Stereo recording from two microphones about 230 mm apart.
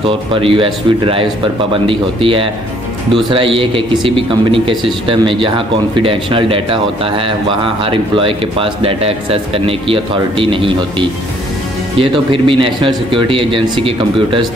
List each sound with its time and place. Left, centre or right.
0.3 s speech: right